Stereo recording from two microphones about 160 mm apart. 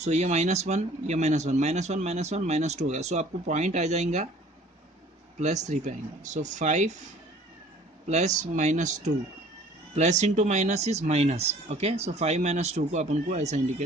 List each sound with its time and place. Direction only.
0.0 s speech: 45° right (ahead or behind)
5.4 s speech: 45° right (ahead or behind)
8.1 s speech: 50° right (ahead or behind)